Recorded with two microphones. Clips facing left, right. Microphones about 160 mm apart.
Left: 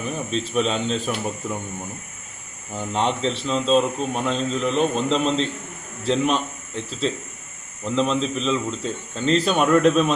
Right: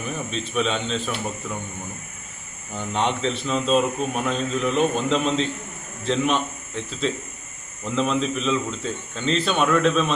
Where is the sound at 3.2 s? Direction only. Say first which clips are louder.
Left 1 dB; 35° left (ahead or behind).